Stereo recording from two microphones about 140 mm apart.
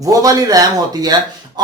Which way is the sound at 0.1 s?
25° right (ahead or behind).